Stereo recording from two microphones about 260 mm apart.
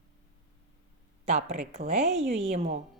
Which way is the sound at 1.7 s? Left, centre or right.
Right.